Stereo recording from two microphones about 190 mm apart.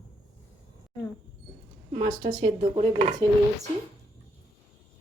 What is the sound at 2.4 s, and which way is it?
Speech, 30° right (ahead or behind).